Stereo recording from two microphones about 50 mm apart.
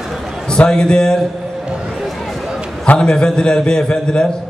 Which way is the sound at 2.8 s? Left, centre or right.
Centre.